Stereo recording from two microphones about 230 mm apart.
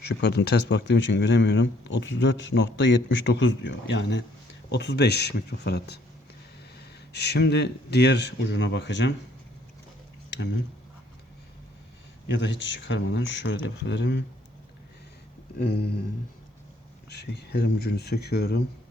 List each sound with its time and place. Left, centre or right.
0.0 s speech: left
12.3 s speech: left
15.5 s speech: left
17.1 s speech: left